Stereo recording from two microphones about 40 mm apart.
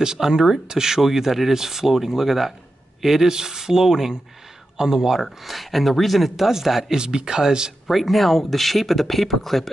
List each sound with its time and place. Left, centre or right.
0.0 s speech: centre
7.8 s speech: centre